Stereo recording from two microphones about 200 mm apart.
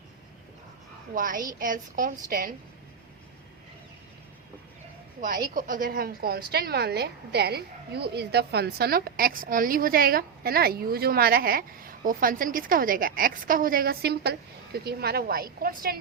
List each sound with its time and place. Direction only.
1.1 s a woman's voice: 40° right (ahead or behind)
5.2 s a woman's voice: 40° right (ahead or behind)